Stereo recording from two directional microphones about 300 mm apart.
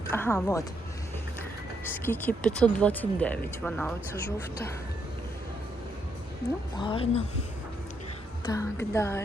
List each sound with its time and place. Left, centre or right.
0.1 s speech: centre
1.8 s speech: centre
6.7 s speech: centre
8.5 s speech: centre